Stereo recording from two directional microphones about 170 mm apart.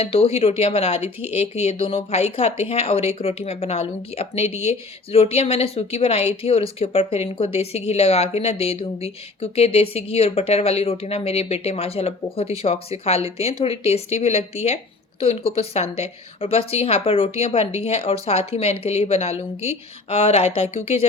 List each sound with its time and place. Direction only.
0.0 s speech: 35° left (ahead or behind)